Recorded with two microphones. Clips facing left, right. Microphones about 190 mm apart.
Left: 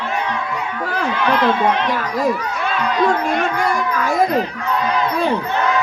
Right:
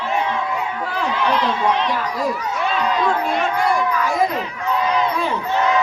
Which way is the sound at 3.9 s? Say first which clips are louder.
Left 2 dB; 40° left (ahead or behind).